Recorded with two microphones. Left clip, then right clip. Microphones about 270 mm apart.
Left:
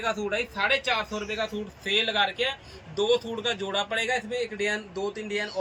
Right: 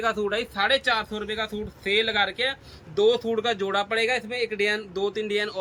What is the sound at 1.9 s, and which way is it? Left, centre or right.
Speech, right.